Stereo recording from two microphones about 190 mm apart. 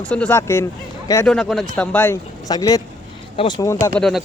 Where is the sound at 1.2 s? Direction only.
Centre (ahead or behind).